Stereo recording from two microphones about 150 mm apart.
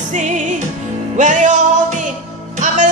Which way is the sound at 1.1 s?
55° right (ahead or behind).